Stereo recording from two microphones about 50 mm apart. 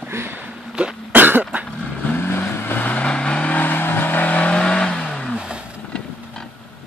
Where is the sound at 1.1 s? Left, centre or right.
Right.